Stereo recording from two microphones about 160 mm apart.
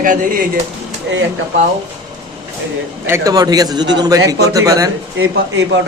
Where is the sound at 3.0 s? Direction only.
20° right (ahead or behind).